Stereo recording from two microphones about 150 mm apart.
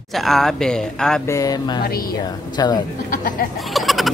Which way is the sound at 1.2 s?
20° left (ahead or behind).